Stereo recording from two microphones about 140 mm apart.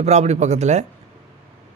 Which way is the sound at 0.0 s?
50° right (ahead or behind).